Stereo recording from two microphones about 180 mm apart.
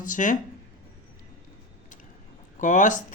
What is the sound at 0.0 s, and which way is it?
Speech, 45° left (ahead or behind).